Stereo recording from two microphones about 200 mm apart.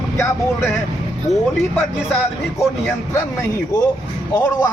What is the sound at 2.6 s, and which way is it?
Speech, 15° left (ahead or behind).